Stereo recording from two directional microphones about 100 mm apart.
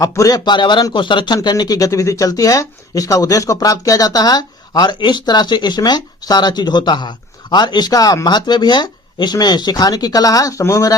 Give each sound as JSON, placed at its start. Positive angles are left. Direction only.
{"t": 0.0, "sound": "speech", "side_deg": 35}